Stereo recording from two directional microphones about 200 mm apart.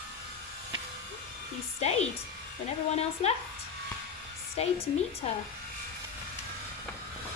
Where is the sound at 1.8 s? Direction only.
35° left (ahead or behind).